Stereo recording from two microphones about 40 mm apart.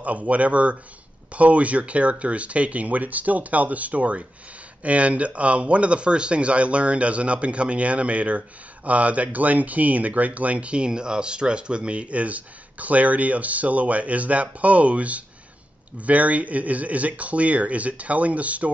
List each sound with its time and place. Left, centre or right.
0.0 s speech: right